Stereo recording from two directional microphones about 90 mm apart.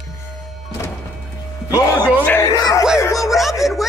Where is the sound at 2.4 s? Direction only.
45° left (ahead or behind).